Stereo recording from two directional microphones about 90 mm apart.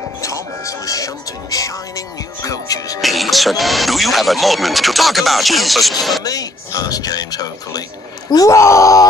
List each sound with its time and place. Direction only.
0.2 s music: 40° left (ahead or behind)
3.0 s speech: centre (ahead or behind)
6.2 s speech: 45° left (ahead or behind)